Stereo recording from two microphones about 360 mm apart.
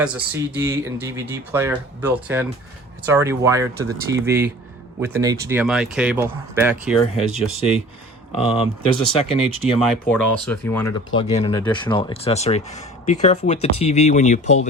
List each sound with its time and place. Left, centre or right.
0.0 s speech: centre
8.4 s speech: centre
9.8 s speech: centre